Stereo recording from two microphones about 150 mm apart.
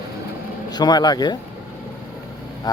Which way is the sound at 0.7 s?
25° left (ahead or behind).